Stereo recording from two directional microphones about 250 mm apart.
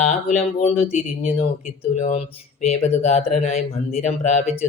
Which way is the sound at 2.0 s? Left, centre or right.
Left.